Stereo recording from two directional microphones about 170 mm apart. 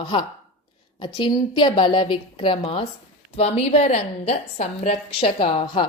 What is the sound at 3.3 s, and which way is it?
A woman's voice, 40° left (ahead or behind).